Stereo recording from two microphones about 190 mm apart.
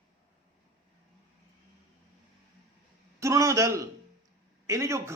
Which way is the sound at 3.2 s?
15° right (ahead or behind).